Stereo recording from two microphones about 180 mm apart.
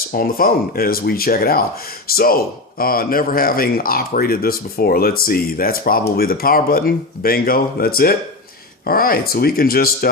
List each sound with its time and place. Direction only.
0.1 s speech: 55° left (ahead or behind)